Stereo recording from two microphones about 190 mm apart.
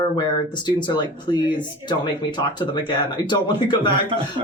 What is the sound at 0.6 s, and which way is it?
Speech, 25° left (ahead or behind).